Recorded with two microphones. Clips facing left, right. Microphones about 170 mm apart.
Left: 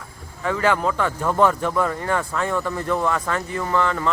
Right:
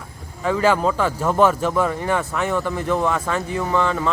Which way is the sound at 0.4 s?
20° right (ahead or behind).